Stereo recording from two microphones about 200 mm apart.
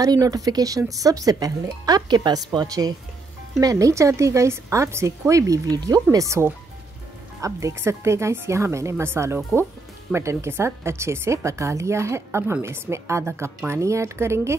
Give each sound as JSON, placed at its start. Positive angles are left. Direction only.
{"t": 0.0, "sound": "a woman's voice", "side_deg": -15}